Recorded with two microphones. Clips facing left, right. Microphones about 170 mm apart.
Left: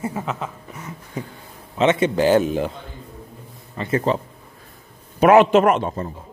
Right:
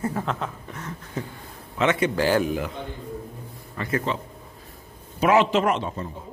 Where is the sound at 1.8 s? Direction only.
25° left (ahead or behind).